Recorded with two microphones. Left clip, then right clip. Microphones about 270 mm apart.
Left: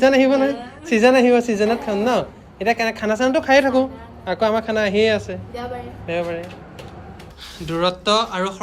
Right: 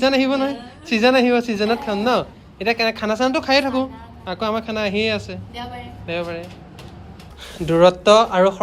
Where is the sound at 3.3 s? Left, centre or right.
Right.